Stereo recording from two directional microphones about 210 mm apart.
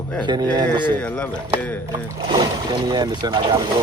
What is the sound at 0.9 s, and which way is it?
Speech, 5° left (ahead or behind).